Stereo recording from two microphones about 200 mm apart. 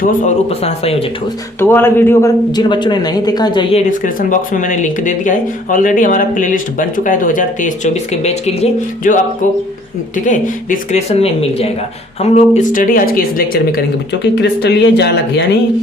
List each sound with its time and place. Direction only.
0.0 s speech: 40° left (ahead or behind)
1.5 s speech: 10° left (ahead or behind); by 9.1 s 35° left (ahead or behind)
10.2 s speech: 40° left (ahead or behind); by 15.4 s 60° left (ahead or behind)